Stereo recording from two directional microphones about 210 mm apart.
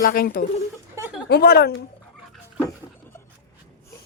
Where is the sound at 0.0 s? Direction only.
45° left (ahead or behind).